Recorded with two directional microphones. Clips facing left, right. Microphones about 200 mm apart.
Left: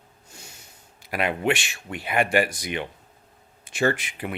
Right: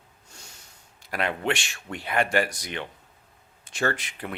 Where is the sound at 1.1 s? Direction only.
10° left (ahead or behind).